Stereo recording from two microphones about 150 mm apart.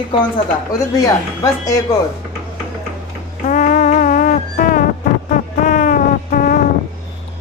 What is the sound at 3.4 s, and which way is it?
Music, 55° left (ahead or behind).